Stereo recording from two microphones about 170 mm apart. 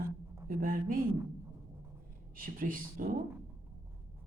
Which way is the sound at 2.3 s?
55° right (ahead or behind).